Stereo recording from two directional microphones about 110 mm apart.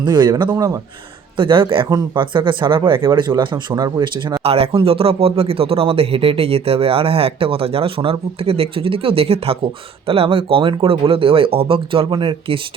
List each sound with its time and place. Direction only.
0.0 s speech: 45° right (ahead or behind)
0.5 s speech: 30° right (ahead or behind)
1.4 s speech: 50° right (ahead or behind)
4.4 s speech: 65° right (ahead or behind)